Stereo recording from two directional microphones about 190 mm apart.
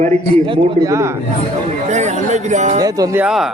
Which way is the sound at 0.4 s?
20° right (ahead or behind).